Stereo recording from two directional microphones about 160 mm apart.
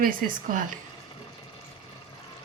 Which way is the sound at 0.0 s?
60° right (ahead or behind).